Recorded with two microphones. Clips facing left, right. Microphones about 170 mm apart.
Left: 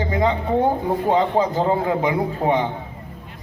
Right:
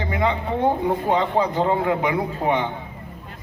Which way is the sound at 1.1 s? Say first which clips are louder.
Left 2 dB; 40° left (ahead or behind).